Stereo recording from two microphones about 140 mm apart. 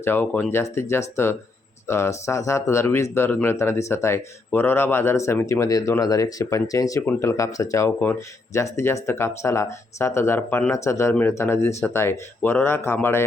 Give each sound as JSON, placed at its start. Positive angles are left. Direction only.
{"t": 0.0, "sound": "speech", "side_deg": 15}